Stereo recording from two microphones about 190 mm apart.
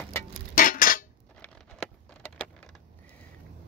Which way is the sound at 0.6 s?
45° left (ahead or behind).